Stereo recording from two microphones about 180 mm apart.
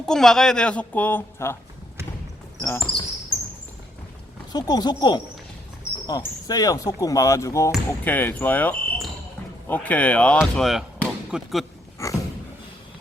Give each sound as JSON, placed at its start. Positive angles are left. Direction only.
{"t": 0.0, "sound": "a woman's voice", "side_deg": 0}
{"t": 2.6, "sound": "speech", "side_deg": 10}
{"t": 4.5, "sound": "speech", "side_deg": 20}
{"t": 12.0, "sound": "dog", "side_deg": 15}